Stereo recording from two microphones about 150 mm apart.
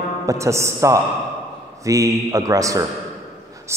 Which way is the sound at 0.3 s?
20° right (ahead or behind).